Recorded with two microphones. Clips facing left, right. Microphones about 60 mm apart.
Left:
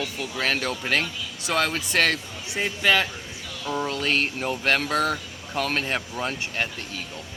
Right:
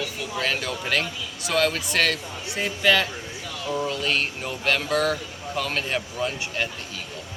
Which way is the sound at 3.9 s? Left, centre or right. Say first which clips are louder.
Left 1 dB; left.